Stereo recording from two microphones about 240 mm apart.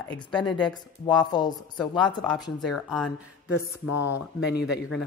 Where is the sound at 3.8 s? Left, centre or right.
Left.